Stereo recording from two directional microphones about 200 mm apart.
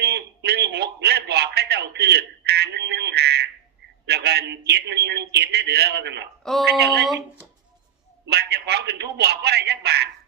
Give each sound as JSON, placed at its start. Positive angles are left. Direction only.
{"t": 0.0, "sound": "a sound", "side_deg": -55}
{"t": 6.4, "sound": "speech", "side_deg": 0}
{"t": 6.7, "sound": "a man's voice", "side_deg": -55}
{"t": 8.3, "sound": "a man's voice", "side_deg": -55}